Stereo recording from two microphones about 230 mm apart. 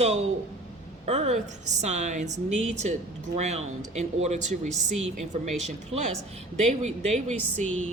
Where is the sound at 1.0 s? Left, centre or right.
Right.